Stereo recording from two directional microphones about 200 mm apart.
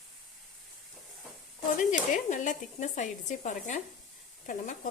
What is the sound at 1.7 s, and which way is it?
Speech, 40° left (ahead or behind).